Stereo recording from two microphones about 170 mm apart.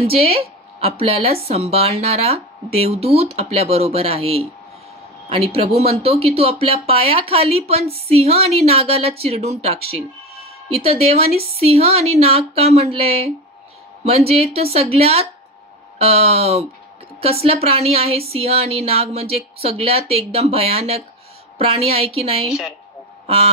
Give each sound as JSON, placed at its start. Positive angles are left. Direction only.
{"t": 0.0, "sound": "speech", "side_deg": -35}
{"t": 5.5, "sound": "speech", "side_deg": -35}
{"t": 22.5, "sound": "a woman's voice", "side_deg": -5}